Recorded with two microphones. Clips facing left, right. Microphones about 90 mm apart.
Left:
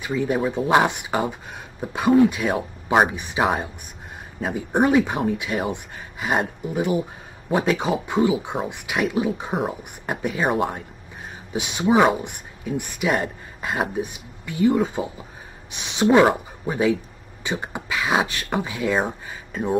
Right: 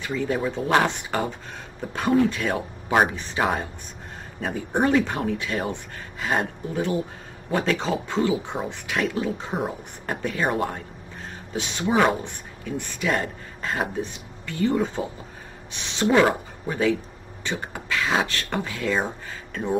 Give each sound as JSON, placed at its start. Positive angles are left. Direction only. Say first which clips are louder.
{"t": 0.0, "sound": "speech", "louder": "left 3 dB", "side_deg": 15}